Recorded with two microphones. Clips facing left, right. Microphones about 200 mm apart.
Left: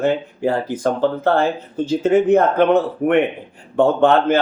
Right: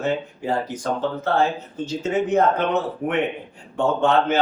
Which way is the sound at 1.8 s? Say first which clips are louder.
Left 8 dB; 75° left (ahead or behind).